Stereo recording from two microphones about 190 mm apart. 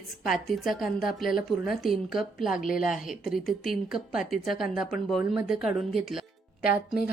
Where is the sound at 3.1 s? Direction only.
Centre (ahead or behind).